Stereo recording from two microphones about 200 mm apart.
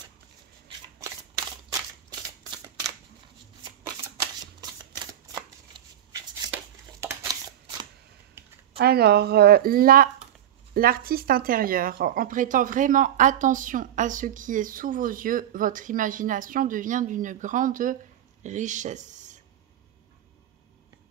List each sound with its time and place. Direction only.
1.7 s a sound: 20° right (ahead or behind)
4.6 s shuffling cards: 20° right (ahead or behind)
6.5 s scissors: 10° right (ahead or behind)
8.7 s speech: 50° right (ahead or behind)